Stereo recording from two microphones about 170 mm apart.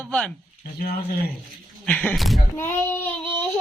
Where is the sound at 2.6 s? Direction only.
15° left (ahead or behind).